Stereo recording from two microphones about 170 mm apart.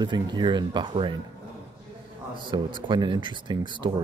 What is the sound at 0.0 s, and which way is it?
Speech, 25° right (ahead or behind).